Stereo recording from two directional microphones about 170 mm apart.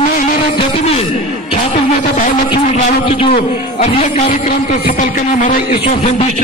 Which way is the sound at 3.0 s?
35° left (ahead or behind).